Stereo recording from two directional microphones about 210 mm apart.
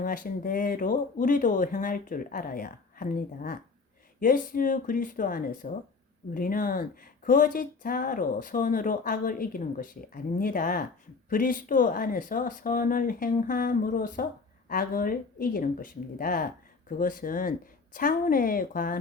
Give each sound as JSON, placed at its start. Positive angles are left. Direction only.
{"t": 0.0, "sound": "speech", "side_deg": 40}